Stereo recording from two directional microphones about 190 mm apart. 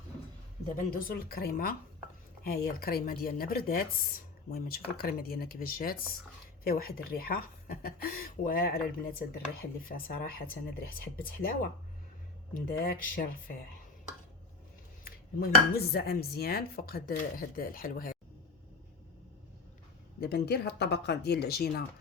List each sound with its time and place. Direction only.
0.8 s speech: 50° left (ahead or behind)
15.4 s speech: 55° left (ahead or behind)
20.2 s speech: 60° left (ahead or behind)